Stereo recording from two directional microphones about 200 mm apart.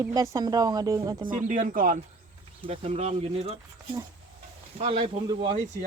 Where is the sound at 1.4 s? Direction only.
40° right (ahead or behind).